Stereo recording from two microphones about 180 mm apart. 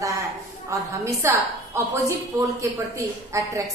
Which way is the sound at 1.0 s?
15° right (ahead or behind).